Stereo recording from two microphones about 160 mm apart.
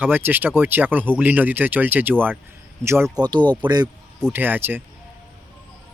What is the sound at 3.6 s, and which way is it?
Speech, 30° right (ahead or behind).